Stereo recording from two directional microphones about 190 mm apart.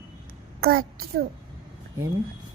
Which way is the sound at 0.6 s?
50° right (ahead or behind).